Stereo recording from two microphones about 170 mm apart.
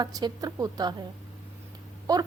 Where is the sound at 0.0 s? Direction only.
20° right (ahead or behind).